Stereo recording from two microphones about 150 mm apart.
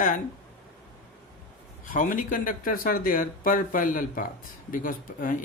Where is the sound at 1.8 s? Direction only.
60° left (ahead or behind).